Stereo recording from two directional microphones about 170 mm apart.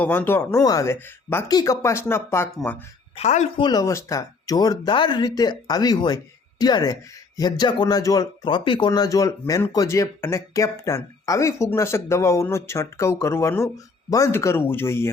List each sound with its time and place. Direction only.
0.0 s speech: 10° left (ahead or behind)
3.2 s speech: 40° left (ahead or behind)
3.6 s speech: 20° left (ahead or behind)